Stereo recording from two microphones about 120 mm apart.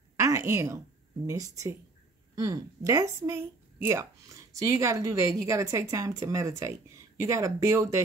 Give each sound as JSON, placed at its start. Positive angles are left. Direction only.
{"t": 0.2, "sound": "speech", "side_deg": -25}